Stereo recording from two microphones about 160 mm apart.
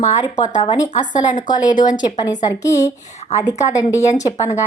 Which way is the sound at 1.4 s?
25° left (ahead or behind).